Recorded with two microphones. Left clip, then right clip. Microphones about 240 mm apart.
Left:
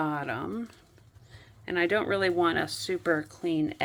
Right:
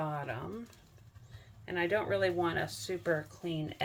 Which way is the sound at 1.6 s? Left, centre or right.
Left.